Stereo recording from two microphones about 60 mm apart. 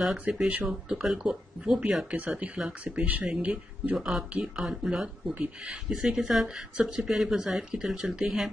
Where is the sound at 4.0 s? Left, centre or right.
Centre.